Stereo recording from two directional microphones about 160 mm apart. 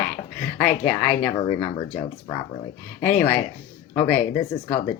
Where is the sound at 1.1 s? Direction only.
30° left (ahead or behind).